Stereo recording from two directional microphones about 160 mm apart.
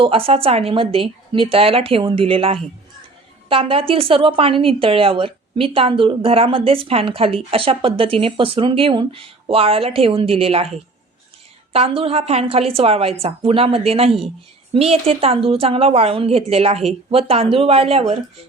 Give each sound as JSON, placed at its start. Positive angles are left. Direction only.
{"t": 0.0, "sound": "a woman's voice", "side_deg": -35}
{"t": 11.7, "sound": "a woman's voice", "side_deg": -35}